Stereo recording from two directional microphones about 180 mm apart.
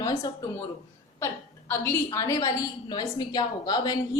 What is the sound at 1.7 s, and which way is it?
A woman's voice, 15° left (ahead or behind).